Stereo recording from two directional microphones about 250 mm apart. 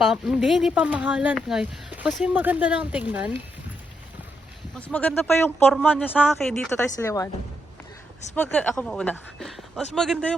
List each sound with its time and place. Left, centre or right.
0.0 s speech: centre
4.7 s speech: centre
6.9 s speech: centre
8.4 s speech: centre